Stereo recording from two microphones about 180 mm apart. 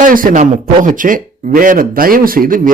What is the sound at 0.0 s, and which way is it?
A man's voice, 50° right (ahead or behind).